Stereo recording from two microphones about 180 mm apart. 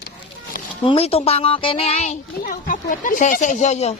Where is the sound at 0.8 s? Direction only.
30° left (ahead or behind).